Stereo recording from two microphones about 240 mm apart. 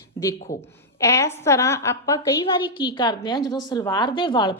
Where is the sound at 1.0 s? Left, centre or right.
Centre.